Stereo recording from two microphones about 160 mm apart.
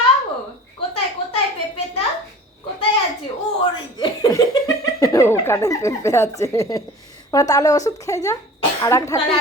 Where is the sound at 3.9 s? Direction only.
25° left (ahead or behind).